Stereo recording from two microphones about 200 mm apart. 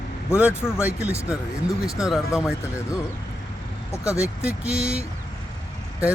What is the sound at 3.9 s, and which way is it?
Speech, 15° left (ahead or behind).